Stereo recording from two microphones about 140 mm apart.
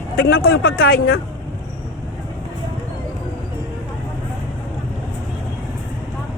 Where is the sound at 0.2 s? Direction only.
90° left.